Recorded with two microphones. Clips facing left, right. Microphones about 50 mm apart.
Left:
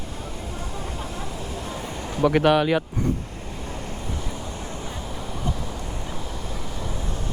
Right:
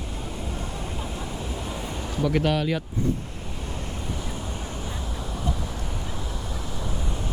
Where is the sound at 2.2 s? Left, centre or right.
Left.